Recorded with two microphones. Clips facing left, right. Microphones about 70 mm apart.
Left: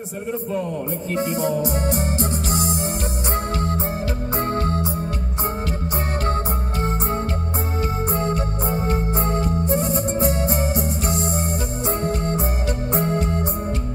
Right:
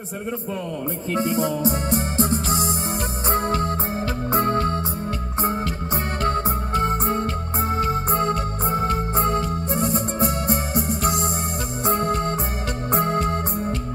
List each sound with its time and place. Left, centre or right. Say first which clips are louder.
1.1 s music: even; left
1.6 s music: even; right
3.5 s organ: right 1 dB; right
7.8 s music: right 1 dB; right
11.8 s organ: right 4 dB; right
12.9 s music: right 2 dB; right